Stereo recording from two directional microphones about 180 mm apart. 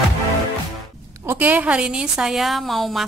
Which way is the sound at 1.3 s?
10° right (ahead or behind).